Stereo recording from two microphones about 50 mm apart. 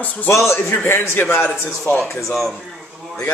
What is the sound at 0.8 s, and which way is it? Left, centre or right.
Speech, left.